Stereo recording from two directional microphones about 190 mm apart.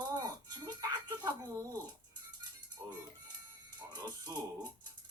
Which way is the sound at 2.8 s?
15° right (ahead or behind).